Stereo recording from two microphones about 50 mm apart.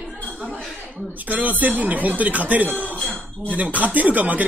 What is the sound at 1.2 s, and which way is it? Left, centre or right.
Speech, right.